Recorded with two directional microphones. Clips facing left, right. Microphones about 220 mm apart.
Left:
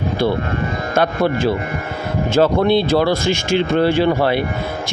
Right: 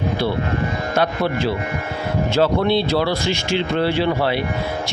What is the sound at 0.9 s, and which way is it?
Speech, 50° left (ahead or behind).